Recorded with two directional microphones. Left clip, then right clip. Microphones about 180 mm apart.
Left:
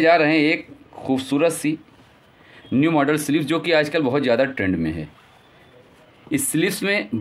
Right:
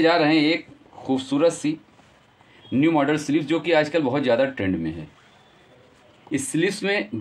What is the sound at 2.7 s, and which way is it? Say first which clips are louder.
A man's voice: left 2 dB; 45° left (ahead or behind).